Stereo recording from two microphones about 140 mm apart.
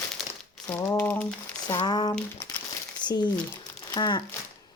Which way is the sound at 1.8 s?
30° left (ahead or behind).